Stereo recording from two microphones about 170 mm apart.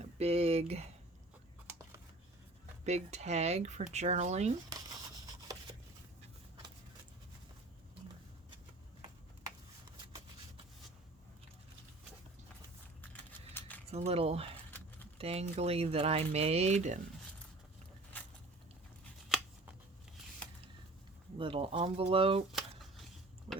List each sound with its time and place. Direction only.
0.0 s speech: 35° right (ahead or behind)
2.8 s speech: 40° right (ahead or behind)
5.5 s a sound: 20° right (ahead or behind)
13.5 s keys jangling: 10° left (ahead or behind)
13.9 s speech: 35° right (ahead or behind)
18.1 s a sound: 10° left (ahead or behind)
21.3 s speech: 30° right (ahead or behind)
22.5 s shuffling cards: centre (ahead or behind)
23.5 s a sound: 30° right (ahead or behind)